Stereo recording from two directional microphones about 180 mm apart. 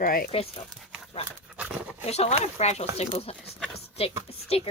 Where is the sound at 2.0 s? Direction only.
35° left (ahead or behind).